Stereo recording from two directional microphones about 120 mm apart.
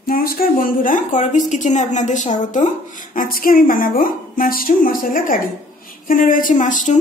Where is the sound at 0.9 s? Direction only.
90° left.